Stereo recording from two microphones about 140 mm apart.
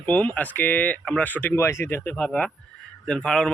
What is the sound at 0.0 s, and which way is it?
Speech, 10° left (ahead or behind).